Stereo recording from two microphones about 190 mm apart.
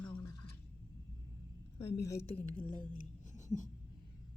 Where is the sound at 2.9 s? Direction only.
40° left (ahead or behind).